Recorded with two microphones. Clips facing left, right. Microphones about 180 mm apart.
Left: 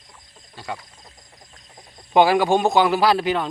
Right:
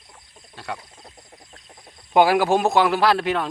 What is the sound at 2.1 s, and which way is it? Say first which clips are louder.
Speech: left 1 dB; centre (ahead or behind).